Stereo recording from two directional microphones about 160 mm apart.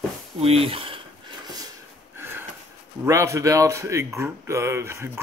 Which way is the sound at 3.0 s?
15° right (ahead or behind).